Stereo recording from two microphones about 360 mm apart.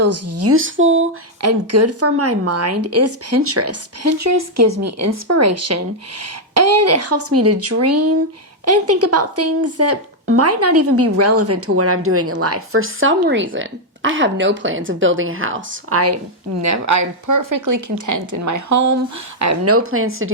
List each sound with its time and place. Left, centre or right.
0.0 s speech: right